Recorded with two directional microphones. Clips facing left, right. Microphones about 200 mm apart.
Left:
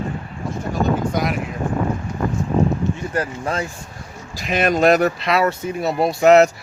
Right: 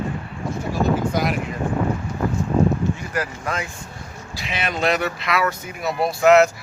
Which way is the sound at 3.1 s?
30° left (ahead or behind).